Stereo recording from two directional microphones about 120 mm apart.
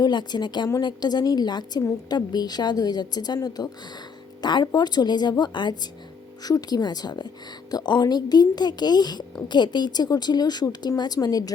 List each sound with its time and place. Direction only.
0.0 s speech: 35° left (ahead or behind)